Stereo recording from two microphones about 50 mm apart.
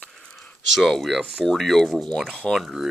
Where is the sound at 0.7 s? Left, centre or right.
Centre.